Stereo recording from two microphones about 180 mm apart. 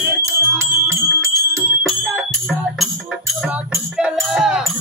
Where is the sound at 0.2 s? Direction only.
15° right (ahead or behind).